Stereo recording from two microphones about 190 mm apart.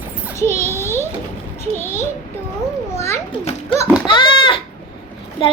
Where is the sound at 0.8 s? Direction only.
15° left (ahead or behind).